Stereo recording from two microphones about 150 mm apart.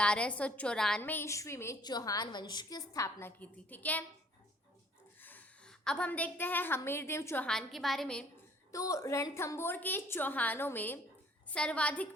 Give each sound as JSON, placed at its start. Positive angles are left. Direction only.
{"t": 0.0, "sound": "a woman's voice", "side_deg": 5}
{"t": 5.2, "sound": "a woman's voice", "side_deg": 10}
{"t": 7.4, "sound": "a woman's voice", "side_deg": 0}
{"t": 8.7, "sound": "a woman's voice", "side_deg": 20}